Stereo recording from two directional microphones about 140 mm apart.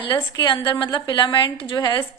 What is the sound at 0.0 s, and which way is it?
A woman's voice, 35° left (ahead or behind).